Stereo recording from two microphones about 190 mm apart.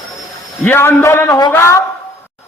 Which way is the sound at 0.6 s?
10° left (ahead or behind).